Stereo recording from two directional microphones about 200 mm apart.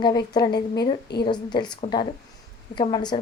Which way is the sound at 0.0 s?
20° left (ahead or behind).